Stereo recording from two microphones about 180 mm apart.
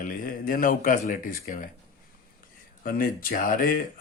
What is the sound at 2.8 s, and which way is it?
Speech, 50° left (ahead or behind).